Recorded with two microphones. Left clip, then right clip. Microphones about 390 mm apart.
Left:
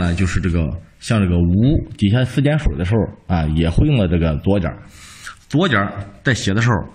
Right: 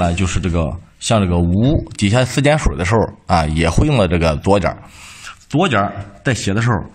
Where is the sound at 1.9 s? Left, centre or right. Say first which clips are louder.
Right 4 dB; centre.